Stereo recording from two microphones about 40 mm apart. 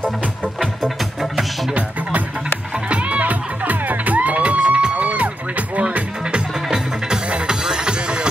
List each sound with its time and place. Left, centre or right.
0.6 s music: centre
1.7 s music: right